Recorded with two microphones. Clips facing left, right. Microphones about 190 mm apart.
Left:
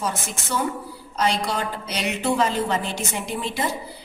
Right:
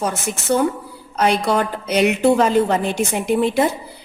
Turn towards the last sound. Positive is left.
turn(degrees=-55)  # may be behind; listen again after turning